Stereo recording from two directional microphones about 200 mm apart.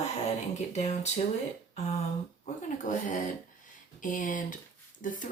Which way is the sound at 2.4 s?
40° left (ahead or behind).